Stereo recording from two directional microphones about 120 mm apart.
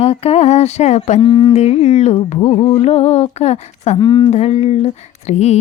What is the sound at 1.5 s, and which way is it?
Speech, 65° left (ahead or behind).